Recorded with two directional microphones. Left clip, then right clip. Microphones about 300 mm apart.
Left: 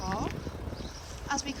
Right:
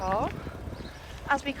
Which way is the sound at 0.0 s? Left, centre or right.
Centre.